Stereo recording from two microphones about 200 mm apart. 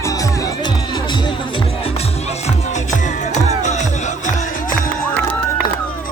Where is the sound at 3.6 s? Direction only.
35° left (ahead or behind).